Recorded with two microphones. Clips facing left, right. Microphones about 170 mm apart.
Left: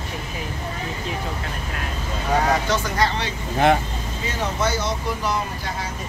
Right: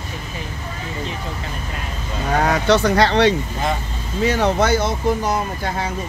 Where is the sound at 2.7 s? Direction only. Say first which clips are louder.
Right 7 dB; 70° right (ahead or behind); by 5.4 s 50° right (ahead or behind).